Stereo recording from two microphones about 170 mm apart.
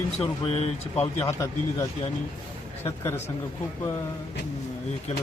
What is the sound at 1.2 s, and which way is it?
Speech, 15° left (ahead or behind).